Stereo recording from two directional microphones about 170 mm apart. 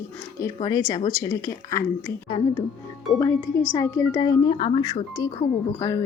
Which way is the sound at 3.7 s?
20° left (ahead or behind).